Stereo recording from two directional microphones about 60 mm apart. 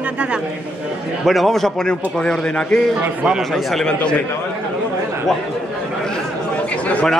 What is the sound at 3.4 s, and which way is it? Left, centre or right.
Speech, centre.